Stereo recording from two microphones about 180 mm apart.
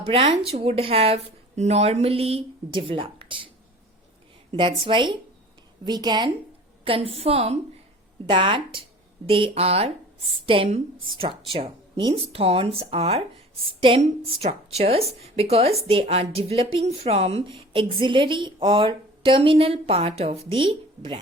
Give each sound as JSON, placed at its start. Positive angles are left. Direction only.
{"t": 0.0, "sound": "speech", "side_deg": -30}
{"t": 4.8, "sound": "a woman's voice", "side_deg": -25}